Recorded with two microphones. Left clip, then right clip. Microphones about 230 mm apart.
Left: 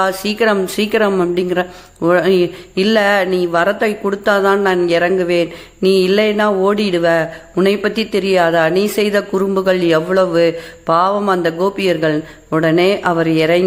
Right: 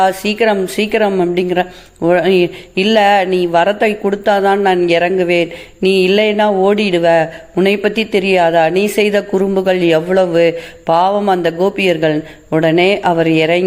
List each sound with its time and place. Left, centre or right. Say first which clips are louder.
0.0 s speech: right 3 dB; centre